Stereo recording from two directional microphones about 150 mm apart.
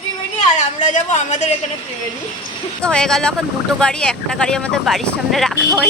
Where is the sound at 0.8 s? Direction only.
50° left (ahead or behind).